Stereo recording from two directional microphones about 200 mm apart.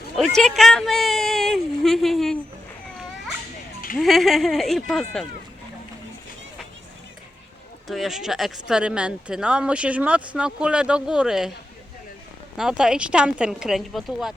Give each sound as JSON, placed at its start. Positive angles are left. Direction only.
{"t": 0.3, "sound": "speech", "side_deg": 0}
{"t": 3.9, "sound": "speech", "side_deg": 0}
{"t": 7.9, "sound": "speech", "side_deg": 0}
{"t": 12.5, "sound": "speech", "side_deg": -5}